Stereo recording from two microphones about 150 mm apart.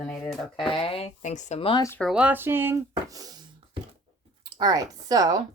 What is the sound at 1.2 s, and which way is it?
Speech, 55° left (ahead or behind).